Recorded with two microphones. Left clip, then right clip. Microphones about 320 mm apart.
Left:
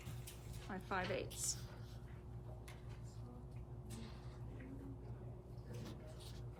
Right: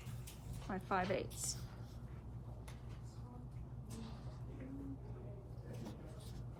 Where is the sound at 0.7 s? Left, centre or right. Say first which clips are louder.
Right 4 dB; right.